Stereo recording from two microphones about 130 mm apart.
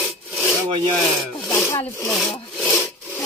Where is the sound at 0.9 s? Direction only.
Centre (ahead or behind).